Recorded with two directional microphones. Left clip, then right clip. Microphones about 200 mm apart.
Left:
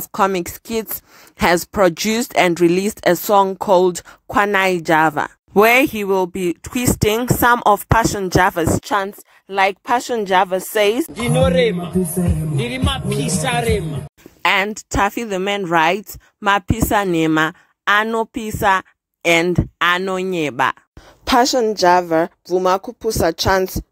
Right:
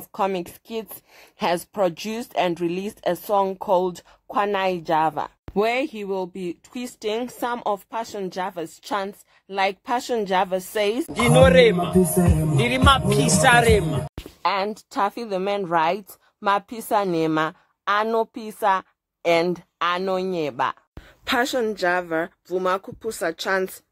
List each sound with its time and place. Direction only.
0.1 s speech: 40° left (ahead or behind)
11.1 s speech: centre (ahead or behind)
14.9 s a woman's voice: 30° left (ahead or behind)